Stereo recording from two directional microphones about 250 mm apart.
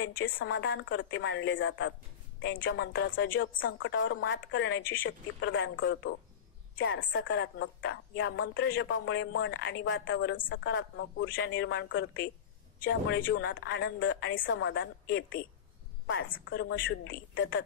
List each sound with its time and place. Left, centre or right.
0.0 s a woman's voice: left
13.3 s a woman's voice: left